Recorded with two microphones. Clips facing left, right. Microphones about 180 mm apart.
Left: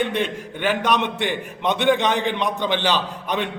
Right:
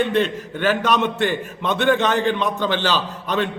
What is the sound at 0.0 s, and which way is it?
A man's voice, 15° left (ahead or behind).